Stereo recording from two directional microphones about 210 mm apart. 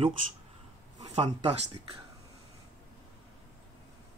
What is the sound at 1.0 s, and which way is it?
Speech, 30° right (ahead or behind).